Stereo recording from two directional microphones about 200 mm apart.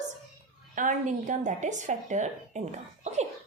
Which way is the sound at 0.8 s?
40° right (ahead or behind).